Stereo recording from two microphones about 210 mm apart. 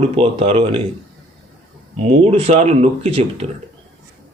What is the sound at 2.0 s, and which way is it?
Speech, 30° right (ahead or behind).